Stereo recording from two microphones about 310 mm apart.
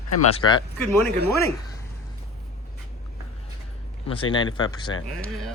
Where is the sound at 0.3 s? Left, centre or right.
Centre.